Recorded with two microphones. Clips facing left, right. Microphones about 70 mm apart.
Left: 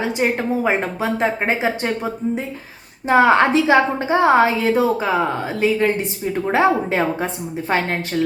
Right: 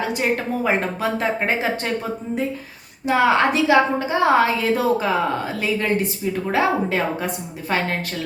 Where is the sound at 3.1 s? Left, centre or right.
Left.